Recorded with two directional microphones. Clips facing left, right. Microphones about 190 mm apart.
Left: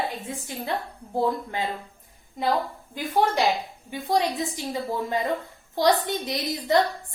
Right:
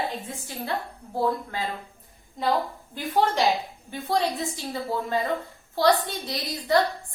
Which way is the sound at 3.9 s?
15° left (ahead or behind).